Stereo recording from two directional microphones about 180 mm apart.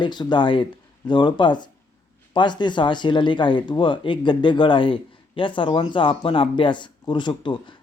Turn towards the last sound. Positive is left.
turn(degrees=25)  # may be behind; listen again after turning